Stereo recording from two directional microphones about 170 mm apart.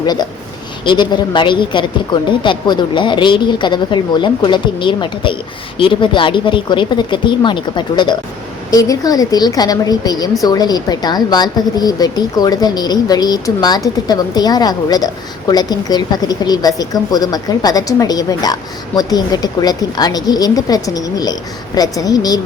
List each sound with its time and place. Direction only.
0.0 s speech: 25° left (ahead or behind)